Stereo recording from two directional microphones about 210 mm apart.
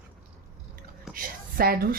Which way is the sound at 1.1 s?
45° right (ahead or behind).